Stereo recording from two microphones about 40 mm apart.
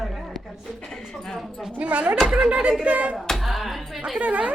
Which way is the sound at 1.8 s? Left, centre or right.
Right.